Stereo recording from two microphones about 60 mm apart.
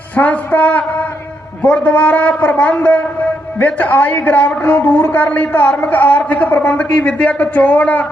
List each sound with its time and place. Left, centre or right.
0.2 s a man's voice: left